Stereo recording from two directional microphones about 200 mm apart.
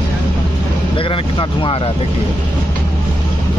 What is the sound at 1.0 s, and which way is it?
Speech, 25° left (ahead or behind).